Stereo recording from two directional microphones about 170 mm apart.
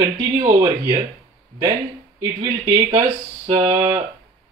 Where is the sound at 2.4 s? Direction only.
30° right (ahead or behind).